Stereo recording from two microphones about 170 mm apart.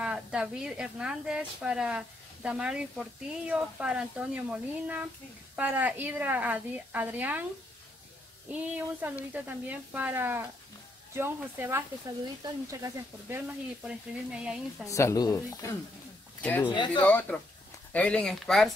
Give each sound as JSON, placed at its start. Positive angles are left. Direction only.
{"t": 0.0, "sound": "speech", "side_deg": -5}
{"t": 8.5, "sound": "speech", "side_deg": -10}
{"t": 12.8, "sound": "speech", "side_deg": -10}
{"t": 14.9, "sound": "speech", "side_deg": 20}
{"t": 16.6, "sound": "speech", "side_deg": 25}
{"t": 17.0, "sound": "speech", "side_deg": 10}